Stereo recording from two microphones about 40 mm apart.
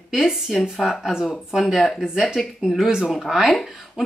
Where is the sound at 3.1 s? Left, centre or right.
Centre.